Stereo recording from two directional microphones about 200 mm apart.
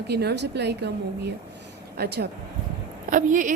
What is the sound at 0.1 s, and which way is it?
Speech, 55° right (ahead or behind).